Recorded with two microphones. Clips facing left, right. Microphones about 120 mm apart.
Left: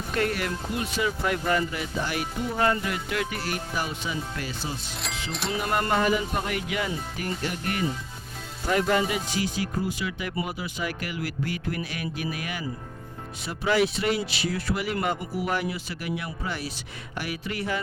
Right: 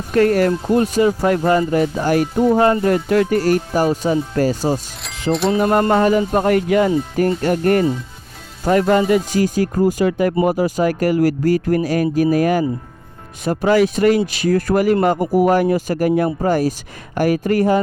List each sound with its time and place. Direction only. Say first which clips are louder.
0.1 s speech: right 14 dB; 45° right (ahead or behind)